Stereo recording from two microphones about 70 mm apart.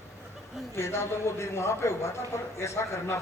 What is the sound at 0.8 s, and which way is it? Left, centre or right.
A man's voice, left.